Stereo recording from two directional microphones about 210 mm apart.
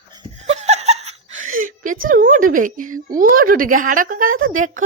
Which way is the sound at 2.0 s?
40° right (ahead or behind).